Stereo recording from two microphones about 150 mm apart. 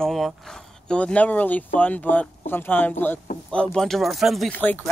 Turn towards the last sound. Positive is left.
turn(degrees=0)  # may be behind; listen again after turning